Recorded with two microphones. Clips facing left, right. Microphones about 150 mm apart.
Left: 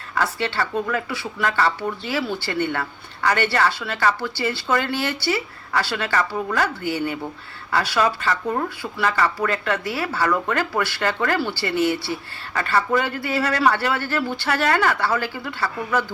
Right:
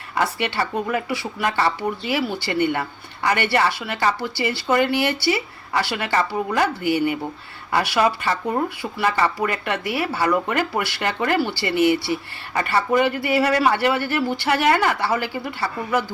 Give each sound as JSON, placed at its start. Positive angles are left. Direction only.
{"t": 0.1, "sound": "speech", "side_deg": -15}